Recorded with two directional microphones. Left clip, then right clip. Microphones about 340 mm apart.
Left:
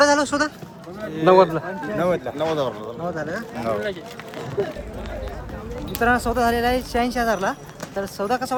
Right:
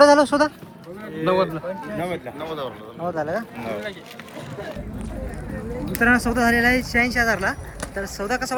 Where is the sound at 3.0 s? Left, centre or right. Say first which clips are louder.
Right 4 dB; centre.